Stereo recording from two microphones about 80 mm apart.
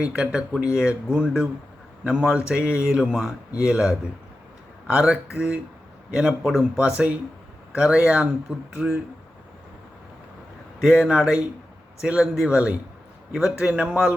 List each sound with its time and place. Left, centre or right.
0.0 s speech: centre
10.8 s speech: centre